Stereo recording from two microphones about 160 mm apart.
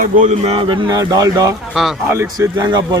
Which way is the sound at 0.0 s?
50° right (ahead or behind).